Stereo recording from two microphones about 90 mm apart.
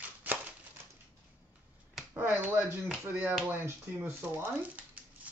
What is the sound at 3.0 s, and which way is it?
Speech, 20° right (ahead or behind).